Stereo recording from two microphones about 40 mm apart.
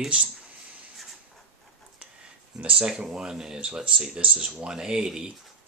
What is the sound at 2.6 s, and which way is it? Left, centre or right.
Speech, right.